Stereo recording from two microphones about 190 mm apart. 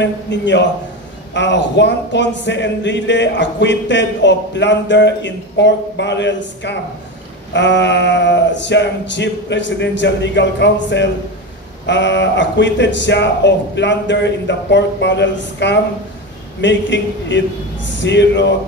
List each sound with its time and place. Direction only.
0.0 s speech: 70° left (ahead or behind)